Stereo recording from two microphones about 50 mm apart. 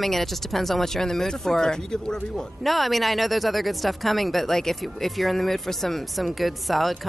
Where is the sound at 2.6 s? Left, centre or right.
Centre.